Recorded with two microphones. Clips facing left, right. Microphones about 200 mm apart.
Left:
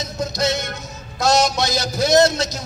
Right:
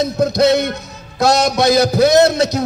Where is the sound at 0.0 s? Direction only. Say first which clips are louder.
Right 9 dB; 60° right (ahead or behind).